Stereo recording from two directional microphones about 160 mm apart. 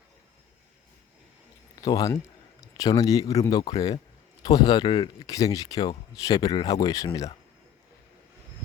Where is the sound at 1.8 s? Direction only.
20° left (ahead or behind).